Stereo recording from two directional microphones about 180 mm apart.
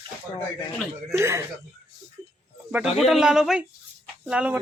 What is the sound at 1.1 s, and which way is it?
Speech, 15° right (ahead or behind).